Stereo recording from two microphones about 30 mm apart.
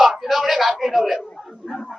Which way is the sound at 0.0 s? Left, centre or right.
Centre.